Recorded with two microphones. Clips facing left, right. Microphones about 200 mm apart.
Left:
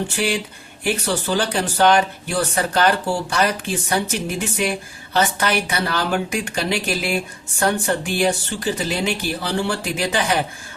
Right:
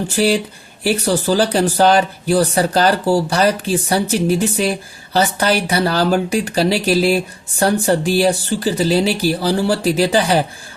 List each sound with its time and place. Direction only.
0.1 s speech: 35° right (ahead or behind)